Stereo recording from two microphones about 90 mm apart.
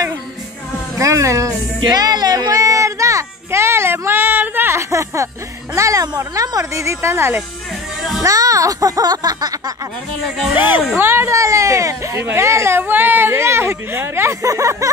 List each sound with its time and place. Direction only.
0.9 s music: 35° right (ahead or behind)
1.8 s a sound: 50° right (ahead or behind)
5.8 s speech: 40° right (ahead or behind)
8.2 s speech: 40° right (ahead or behind)
10.2 s speech: centre (ahead or behind)
10.5 s speech: 20° right (ahead or behind); by 14.9 s 40° right (ahead or behind)